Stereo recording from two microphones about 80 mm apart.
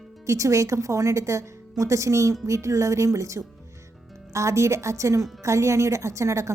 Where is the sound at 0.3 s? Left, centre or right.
Right.